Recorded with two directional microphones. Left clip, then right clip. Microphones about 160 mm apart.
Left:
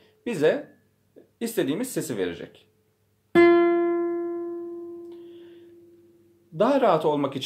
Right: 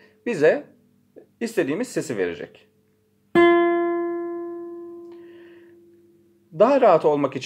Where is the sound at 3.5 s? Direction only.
15° left (ahead or behind).